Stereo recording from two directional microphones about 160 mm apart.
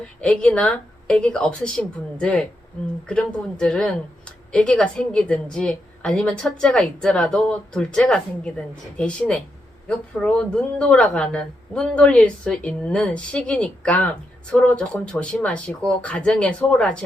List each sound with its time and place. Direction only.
0.2 s speech: 5° left (ahead or behind)